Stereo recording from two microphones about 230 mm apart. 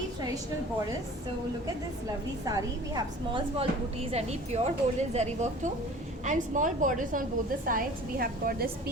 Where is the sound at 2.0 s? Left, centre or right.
Centre.